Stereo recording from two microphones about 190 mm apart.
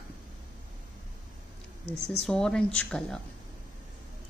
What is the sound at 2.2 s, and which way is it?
Speech, 5° left (ahead or behind).